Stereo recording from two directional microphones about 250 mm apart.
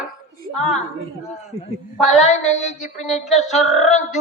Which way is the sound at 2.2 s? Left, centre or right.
Left.